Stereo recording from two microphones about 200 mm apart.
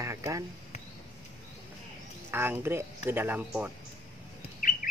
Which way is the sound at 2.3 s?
10° right (ahead or behind).